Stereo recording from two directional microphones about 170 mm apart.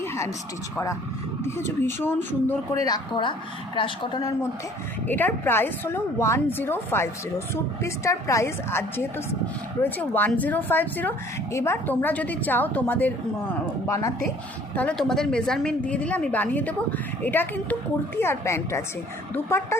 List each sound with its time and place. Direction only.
0.0 s a sound: 15° left (ahead or behind)
1.5 s a woman's voice: 15° left (ahead or behind)
5.0 s a woman's voice: 10° left (ahead or behind)
14.8 s a woman's voice: 5° left (ahead or behind)